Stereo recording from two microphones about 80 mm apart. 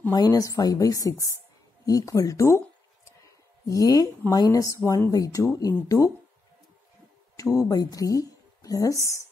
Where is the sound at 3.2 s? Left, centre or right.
Left.